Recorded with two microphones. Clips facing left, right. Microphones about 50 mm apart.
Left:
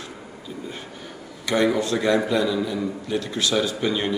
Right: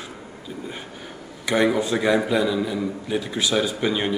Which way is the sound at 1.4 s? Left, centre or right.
Centre.